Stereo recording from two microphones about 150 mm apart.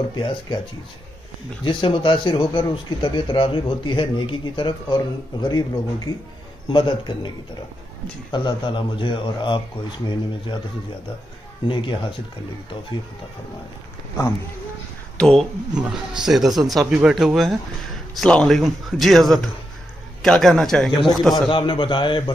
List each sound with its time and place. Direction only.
0.1 s speech: 30° left (ahead or behind)
1.6 s speech: 30° left (ahead or behind)
11.6 s speech: 35° left (ahead or behind)
15.1 s speech: 5° left (ahead or behind)
21.5 s speech: 35° left (ahead or behind)